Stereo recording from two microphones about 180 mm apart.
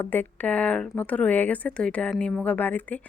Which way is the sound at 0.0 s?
10° left (ahead or behind).